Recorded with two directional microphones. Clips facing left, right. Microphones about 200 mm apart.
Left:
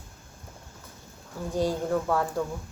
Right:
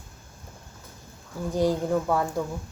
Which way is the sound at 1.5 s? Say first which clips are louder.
Right 2 dB; 15° right (ahead or behind).